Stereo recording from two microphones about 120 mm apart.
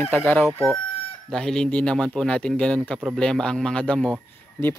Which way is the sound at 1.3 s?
5° left (ahead or behind).